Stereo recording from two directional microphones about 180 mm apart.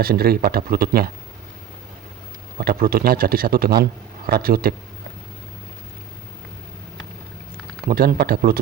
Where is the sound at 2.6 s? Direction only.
55° right (ahead or behind).